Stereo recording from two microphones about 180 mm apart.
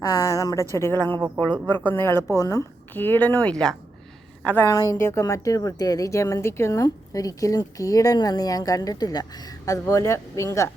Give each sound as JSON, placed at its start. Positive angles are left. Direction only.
{"t": 0.0, "sound": "a woman's voice", "side_deg": 20}